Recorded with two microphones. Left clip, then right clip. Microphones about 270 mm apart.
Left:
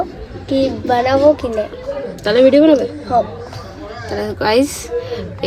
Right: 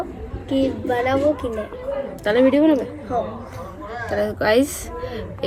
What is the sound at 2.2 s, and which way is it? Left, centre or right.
Speech, centre.